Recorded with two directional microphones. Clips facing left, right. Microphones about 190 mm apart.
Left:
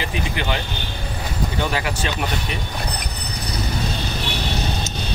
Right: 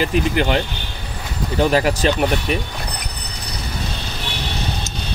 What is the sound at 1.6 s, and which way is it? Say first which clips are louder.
Speech: right 10 dB; 40° right (ahead or behind).